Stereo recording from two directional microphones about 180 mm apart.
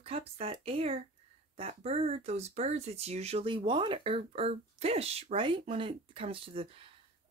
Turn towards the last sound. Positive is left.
turn(degrees=-30)  # may be behind; listen again after turning